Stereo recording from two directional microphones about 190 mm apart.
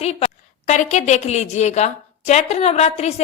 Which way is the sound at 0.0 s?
35° left (ahead or behind).